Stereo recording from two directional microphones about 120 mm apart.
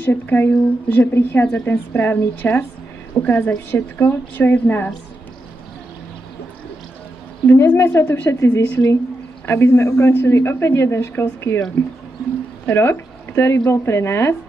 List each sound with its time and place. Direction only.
0.0 s speech: 15° left (ahead or behind)
7.4 s a woman's voice: 20° left (ahead or behind)
12.6 s a woman's voice: 20° left (ahead or behind)